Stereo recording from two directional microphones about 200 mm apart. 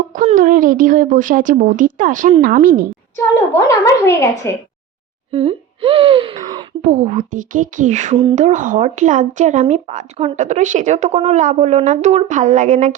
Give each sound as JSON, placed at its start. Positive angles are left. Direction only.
{"t": 0.1, "sound": "speech", "side_deg": -40}
{"t": 3.3, "sound": "a woman's voice", "side_deg": 15}
{"t": 5.3, "sound": "speech", "side_deg": -30}
{"t": 7.0, "sound": "speech", "side_deg": -40}